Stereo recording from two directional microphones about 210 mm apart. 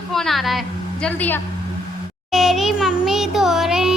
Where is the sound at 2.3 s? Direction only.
Centre (ahead or behind).